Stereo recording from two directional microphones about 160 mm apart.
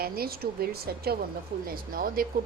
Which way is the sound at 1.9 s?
65° right (ahead or behind).